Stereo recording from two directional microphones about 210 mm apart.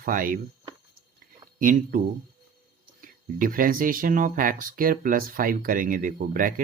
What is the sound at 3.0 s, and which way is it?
Speech, 40° right (ahead or behind).